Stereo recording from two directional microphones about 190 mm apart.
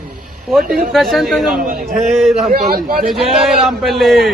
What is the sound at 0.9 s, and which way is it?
Speech, centre (ahead or behind).